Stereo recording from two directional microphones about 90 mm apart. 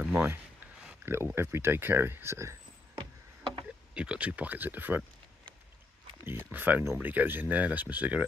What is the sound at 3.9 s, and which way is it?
Speech, 10° right (ahead or behind).